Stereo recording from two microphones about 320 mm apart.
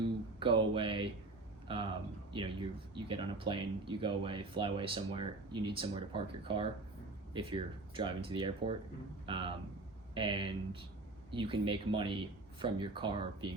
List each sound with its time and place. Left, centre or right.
0.3 s speech: centre